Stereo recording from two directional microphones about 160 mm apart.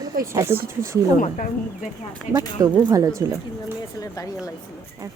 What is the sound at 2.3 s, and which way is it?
Speech, 50° left (ahead or behind).